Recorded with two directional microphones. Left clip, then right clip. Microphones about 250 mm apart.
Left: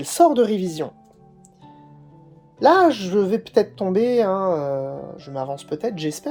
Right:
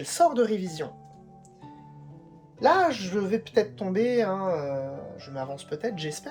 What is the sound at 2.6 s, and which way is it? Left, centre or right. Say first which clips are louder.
Speech: left 7 dB; left.